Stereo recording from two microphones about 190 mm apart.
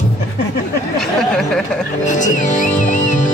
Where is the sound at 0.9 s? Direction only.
5° left (ahead or behind).